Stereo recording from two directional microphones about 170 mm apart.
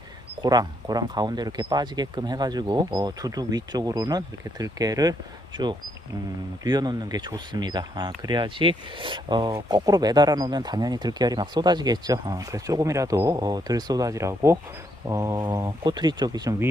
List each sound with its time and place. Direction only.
0.4 s speech: 25° right (ahead or behind)
6.7 s speech: 25° right (ahead or behind)